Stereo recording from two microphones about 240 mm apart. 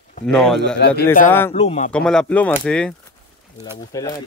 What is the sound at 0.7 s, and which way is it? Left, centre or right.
Speech, left.